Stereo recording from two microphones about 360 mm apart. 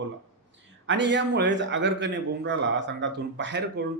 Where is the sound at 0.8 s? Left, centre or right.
Right.